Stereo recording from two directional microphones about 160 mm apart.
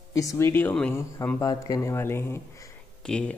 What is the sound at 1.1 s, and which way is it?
Speech, 20° left (ahead or behind).